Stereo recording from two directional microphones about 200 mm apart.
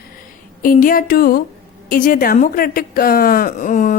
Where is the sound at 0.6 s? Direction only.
45° left (ahead or behind).